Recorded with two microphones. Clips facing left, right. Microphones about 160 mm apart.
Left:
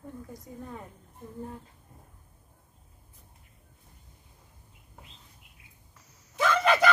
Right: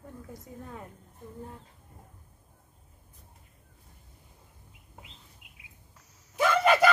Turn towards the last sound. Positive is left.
turn(degrees=-10)  # may be behind; listen again after turning